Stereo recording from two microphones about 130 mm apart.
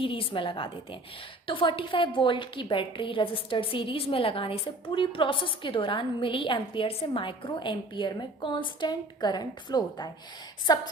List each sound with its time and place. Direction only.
0.0 s a woman's voice: 45° left (ahead or behind)